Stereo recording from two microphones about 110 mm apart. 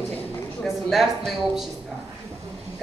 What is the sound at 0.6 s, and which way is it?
Speech, 5° right (ahead or behind).